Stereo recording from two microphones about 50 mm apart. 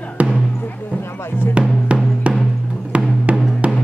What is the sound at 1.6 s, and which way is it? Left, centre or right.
Music, right.